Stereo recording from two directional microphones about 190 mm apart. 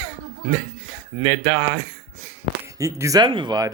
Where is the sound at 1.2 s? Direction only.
15° right (ahead or behind).